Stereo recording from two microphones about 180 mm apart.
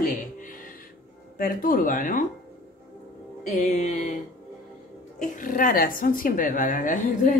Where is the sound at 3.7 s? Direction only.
40° left (ahead or behind).